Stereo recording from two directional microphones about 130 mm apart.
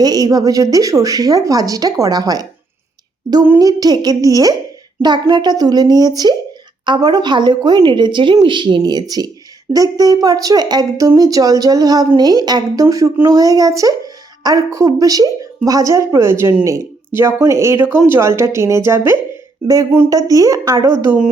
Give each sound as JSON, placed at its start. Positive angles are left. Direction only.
{"t": 0.0, "sound": "speech", "side_deg": -30}
{"t": 3.6, "sound": "a woman's voice", "side_deg": -30}